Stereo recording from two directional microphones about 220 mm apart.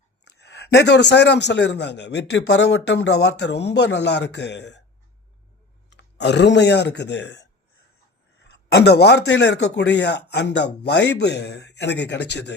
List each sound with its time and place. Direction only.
0.3 s a man's voice: 50° left (ahead or behind)
5.9 s speech: 50° left (ahead or behind)
8.4 s a man's voice: 50° left (ahead or behind)